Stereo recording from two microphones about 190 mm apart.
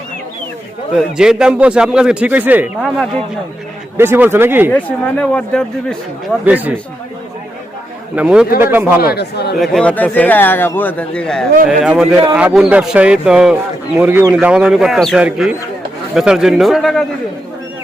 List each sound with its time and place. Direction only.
0.9 s a man's voice: 5° right (ahead or behind)
3.9 s speech: 10° right (ahead or behind)
4.7 s a man's voice: 5° left (ahead or behind)
6.4 s speech: 10° right (ahead or behind)
8.1 s speech: 5° right (ahead or behind)
9.0 s speech: 55° left (ahead or behind)
9.6 s a man's voice: 5° left (ahead or behind)